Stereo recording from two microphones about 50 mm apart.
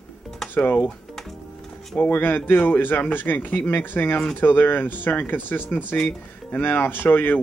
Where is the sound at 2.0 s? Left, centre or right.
Left.